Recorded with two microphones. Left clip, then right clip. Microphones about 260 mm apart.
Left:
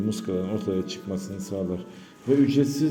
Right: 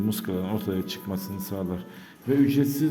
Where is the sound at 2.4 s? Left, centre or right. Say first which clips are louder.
Left 1 dB; centre.